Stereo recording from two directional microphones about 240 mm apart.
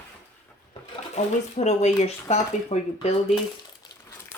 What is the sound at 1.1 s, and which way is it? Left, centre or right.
Speech, left.